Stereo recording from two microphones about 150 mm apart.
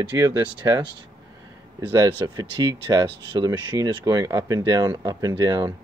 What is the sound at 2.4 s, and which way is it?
Speech, 30° right (ahead or behind).